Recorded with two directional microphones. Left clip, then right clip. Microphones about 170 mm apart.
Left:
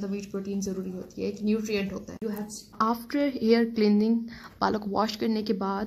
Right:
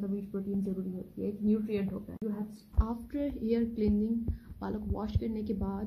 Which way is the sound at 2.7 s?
35° left (ahead or behind).